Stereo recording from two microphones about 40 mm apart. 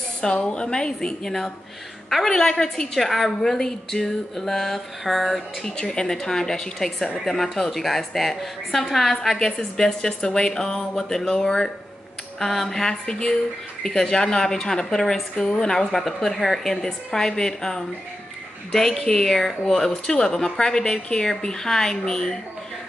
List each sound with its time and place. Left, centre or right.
0.3 s a woman's voice: left; by 5.7 s centre
5.8 s a woman's voice: centre
12.4 s a woman's voice: centre
13.0 s speech: left
13.8 s a woman's voice: centre